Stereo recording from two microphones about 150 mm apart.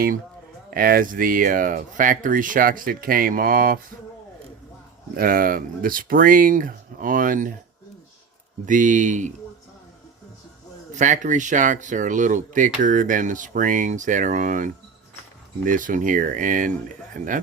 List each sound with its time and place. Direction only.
0.7 s speech: 75° right (ahead or behind)
5.1 s speech: 70° right (ahead or behind)
8.6 s speech: 60° right (ahead or behind)
10.9 s speech: 55° right (ahead or behind)